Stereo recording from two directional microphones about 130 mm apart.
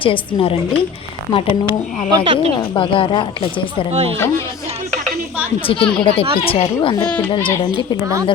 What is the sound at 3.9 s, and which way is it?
Speech, 50° right (ahead or behind).